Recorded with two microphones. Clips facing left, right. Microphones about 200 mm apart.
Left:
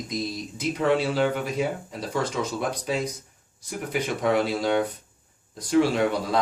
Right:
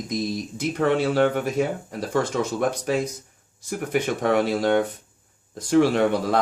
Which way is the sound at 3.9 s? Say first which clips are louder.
Right 2 dB; 55° right (ahead or behind).